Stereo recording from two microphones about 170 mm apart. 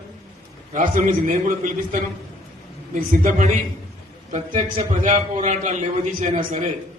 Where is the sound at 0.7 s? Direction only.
50° right (ahead or behind).